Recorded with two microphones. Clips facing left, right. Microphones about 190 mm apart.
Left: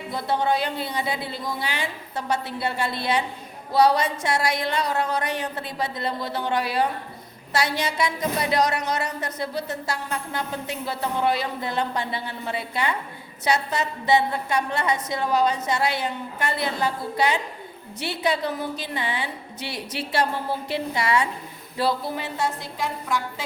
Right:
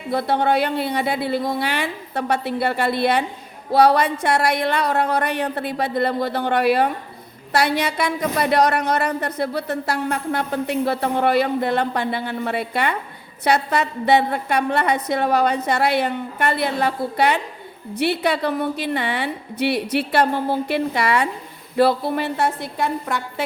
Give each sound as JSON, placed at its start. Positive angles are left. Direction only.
{"t": 0.1, "sound": "a woman's voice", "side_deg": -60}